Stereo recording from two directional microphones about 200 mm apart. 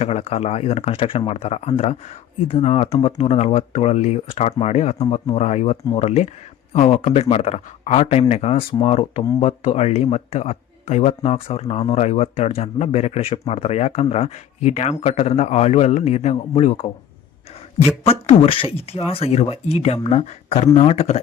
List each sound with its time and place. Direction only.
0.0 s speech: 30° left (ahead or behind)
18.0 s speech: 30° left (ahead or behind)